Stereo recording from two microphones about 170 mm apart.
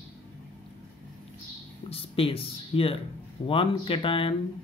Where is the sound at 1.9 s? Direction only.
35° left (ahead or behind).